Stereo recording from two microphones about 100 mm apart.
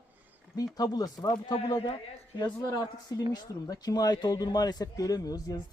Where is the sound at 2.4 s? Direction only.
40° left (ahead or behind).